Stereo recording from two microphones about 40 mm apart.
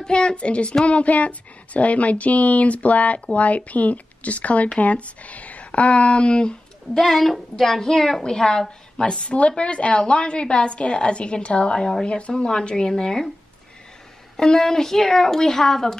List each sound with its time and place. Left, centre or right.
0.0 s a woman's voice: left
7.0 s a woman's voice: centre
9.0 s a woman's voice: left
14.3 s speech: centre